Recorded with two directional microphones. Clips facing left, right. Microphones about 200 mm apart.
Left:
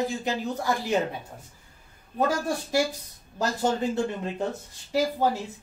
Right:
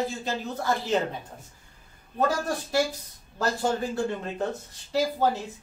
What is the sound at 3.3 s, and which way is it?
Speech, 20° left (ahead or behind).